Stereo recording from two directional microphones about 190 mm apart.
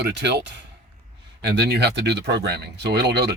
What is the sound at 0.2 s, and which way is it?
Speech, 65° right (ahead or behind).